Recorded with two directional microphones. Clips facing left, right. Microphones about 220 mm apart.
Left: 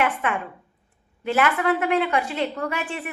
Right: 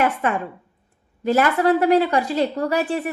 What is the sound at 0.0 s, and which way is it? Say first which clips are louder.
A woman's voice: right 3 dB; 35° right (ahead or behind).